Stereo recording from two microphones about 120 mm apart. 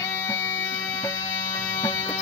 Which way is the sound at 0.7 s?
35° left (ahead or behind).